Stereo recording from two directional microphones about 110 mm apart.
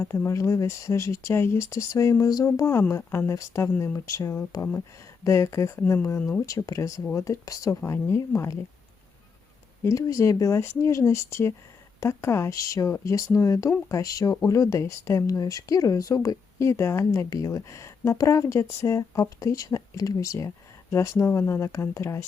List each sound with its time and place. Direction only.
0.0 s speech: 25° left (ahead or behind)
9.8 s speech: 30° left (ahead or behind)